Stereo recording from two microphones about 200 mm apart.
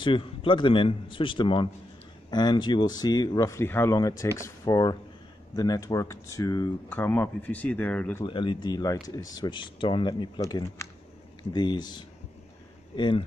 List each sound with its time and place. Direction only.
0.0 s speech: 25° left (ahead or behind); by 8.3 s 10° left (ahead or behind)
8.3 s speech: 25° left (ahead or behind)